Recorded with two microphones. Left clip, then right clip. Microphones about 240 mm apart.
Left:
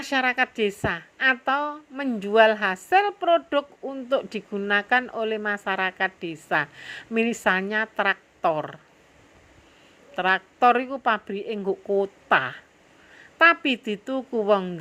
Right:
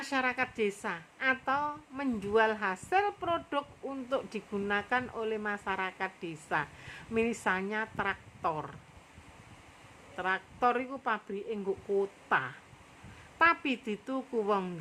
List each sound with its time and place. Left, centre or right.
0.0 s speech: centre
10.2 s speech: centre